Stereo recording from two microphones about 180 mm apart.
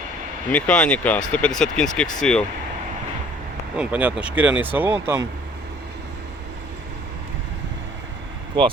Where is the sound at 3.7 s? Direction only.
5° right (ahead or behind).